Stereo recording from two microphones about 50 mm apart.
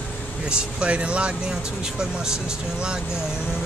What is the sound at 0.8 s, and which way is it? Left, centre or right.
Speech, right.